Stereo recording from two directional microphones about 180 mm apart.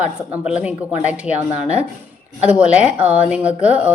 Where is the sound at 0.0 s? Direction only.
10° right (ahead or behind).